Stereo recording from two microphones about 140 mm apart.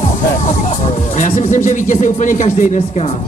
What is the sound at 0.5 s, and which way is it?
Speech, 50° left (ahead or behind).